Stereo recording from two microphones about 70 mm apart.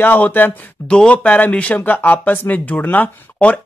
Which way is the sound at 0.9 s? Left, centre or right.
Centre.